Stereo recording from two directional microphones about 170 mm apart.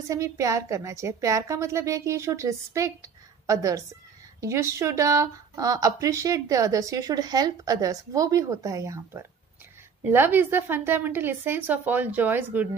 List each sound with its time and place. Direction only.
0.1 s a woman's voice: 20° right (ahead or behind)